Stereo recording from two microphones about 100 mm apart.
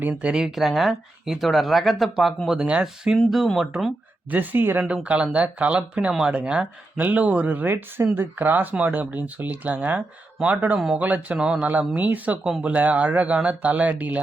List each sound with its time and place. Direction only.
0.0 s speech: 15° right (ahead or behind)
2.6 s speech: 10° right (ahead or behind)
4.3 s speech: 20° right (ahead or behind)
11.0 s speech: 15° right (ahead or behind)